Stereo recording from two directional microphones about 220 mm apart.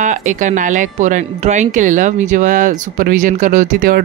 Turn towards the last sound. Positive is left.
turn(degrees=-40)  # may be behind; listen again after turning